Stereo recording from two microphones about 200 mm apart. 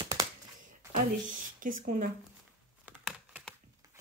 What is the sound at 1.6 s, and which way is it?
Speech, 40° right (ahead or behind).